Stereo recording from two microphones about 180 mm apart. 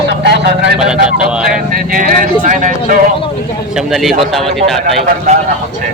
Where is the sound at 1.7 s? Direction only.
50° right (ahead or behind).